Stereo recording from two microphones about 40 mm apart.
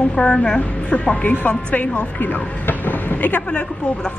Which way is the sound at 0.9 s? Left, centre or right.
Left.